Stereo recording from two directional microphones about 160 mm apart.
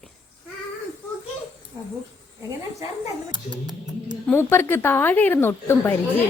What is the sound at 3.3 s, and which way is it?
Speech, 25° right (ahead or behind).